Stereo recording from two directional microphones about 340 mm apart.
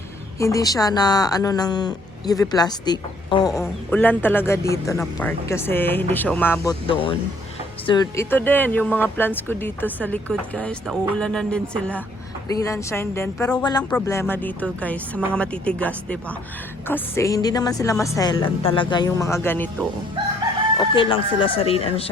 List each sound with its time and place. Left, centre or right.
0.3 s speech: centre
20.9 s speech: centre